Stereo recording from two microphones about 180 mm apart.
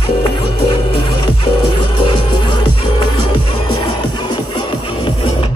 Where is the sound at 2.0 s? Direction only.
25° left (ahead or behind).